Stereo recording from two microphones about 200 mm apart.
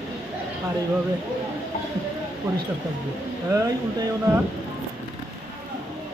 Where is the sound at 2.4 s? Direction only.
15° right (ahead or behind).